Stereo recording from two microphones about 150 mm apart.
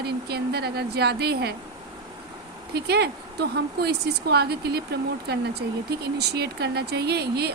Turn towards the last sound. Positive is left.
turn(degrees=-90)